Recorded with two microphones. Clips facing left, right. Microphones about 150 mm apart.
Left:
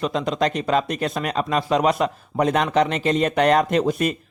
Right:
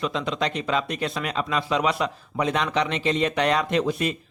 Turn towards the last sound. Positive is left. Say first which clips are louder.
# left 3 dB
turn(degrees=45)  # may be behind; listen again after turning